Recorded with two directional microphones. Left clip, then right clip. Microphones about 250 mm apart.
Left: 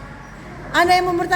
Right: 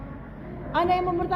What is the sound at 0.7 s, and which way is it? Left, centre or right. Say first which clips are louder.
Speech: left 8 dB; left.